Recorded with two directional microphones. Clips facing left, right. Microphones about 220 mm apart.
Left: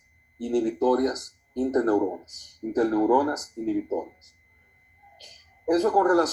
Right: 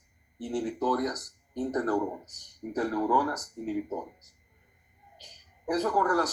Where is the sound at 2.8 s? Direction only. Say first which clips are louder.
Left 7 dB; 35° left (ahead or behind).